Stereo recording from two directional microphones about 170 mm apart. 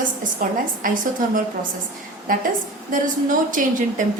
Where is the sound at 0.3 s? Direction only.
55° right (ahead or behind).